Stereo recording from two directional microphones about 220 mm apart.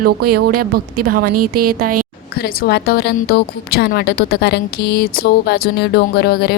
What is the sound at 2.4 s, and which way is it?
A woman's voice, 45° left (ahead or behind).